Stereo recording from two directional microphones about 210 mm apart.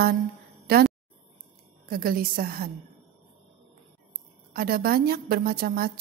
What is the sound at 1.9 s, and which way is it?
Speech, 45° right (ahead or behind).